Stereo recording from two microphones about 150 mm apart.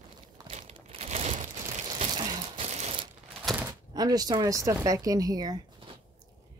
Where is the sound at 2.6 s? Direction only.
45° right (ahead or behind).